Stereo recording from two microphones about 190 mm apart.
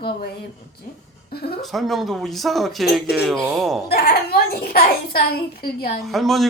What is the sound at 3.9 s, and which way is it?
A child's voice, 55° left (ahead or behind).